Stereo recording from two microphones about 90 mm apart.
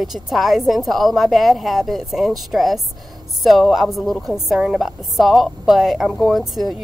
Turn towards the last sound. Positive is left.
turn(degrees=0)  # may be behind; listen again after turning